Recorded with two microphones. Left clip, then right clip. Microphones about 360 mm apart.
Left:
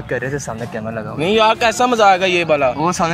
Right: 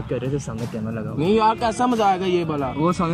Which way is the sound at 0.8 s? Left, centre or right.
Left.